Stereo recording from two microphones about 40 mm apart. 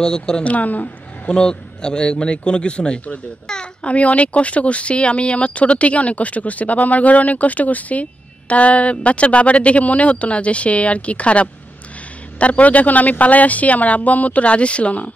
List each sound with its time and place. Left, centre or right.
0.0 s a man's voice: centre
0.4 s speech: left
1.2 s a man's voice: left
3.8 s speech: left